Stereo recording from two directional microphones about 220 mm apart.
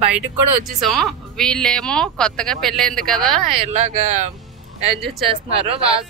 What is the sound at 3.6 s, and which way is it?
Speech, 30° right (ahead or behind).